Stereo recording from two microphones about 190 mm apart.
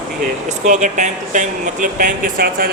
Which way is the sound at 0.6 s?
40° right (ahead or behind).